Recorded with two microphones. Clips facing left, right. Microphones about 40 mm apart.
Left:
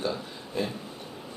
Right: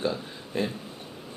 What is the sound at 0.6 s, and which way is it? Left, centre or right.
Speech, right.